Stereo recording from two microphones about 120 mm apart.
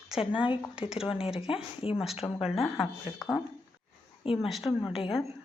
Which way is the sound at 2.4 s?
Centre (ahead or behind).